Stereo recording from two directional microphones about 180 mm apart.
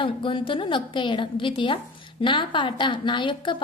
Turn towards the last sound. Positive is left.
turn(degrees=25)  # may be behind; listen again after turning